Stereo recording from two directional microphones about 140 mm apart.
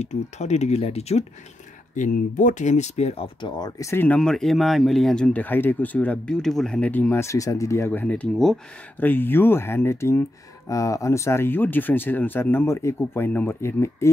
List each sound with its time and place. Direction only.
0.0 s speech: 55° left (ahead or behind)
2.0 s speech: 65° left (ahead or behind); by 4.2 s 15° left (ahead or behind)
4.2 s speech: 5° left (ahead or behind); by 14.1 s 20° left (ahead or behind)